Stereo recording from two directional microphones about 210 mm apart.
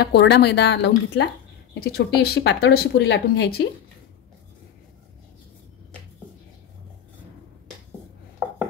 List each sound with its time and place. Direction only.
0.0 s speech: 55° left (ahead or behind)